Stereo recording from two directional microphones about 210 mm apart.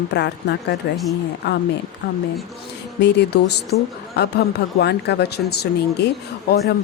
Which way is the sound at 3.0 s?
55° left (ahead or behind).